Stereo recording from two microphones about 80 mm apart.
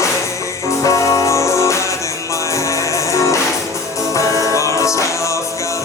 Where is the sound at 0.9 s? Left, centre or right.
Left.